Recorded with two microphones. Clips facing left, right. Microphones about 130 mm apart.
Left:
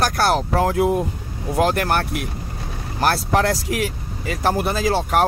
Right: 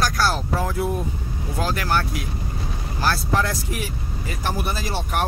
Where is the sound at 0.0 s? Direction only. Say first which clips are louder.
Left 4 dB; 55° left (ahead or behind); by 1.0 s 90° left.